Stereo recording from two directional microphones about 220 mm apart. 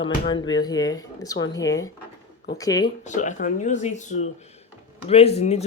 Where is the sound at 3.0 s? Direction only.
35° left (ahead or behind).